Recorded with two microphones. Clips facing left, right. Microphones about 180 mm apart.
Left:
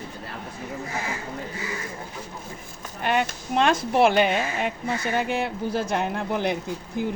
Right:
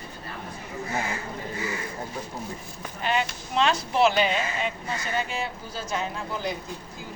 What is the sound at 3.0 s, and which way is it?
Speech, 55° left (ahead or behind).